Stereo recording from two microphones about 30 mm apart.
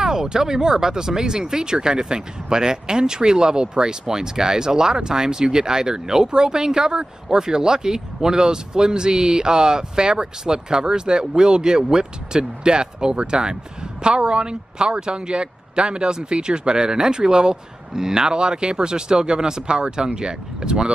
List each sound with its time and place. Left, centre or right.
0.0 s speech: centre